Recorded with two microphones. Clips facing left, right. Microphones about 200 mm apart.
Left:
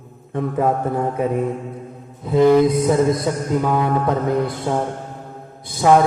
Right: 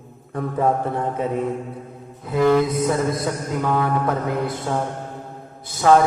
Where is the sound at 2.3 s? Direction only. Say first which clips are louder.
Left 4 dB; 20° left (ahead or behind).